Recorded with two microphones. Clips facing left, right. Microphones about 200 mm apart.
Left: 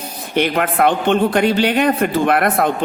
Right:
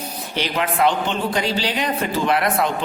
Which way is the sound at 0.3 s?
55° left (ahead or behind).